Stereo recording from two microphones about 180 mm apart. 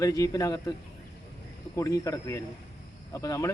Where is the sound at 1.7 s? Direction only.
15° left (ahead or behind).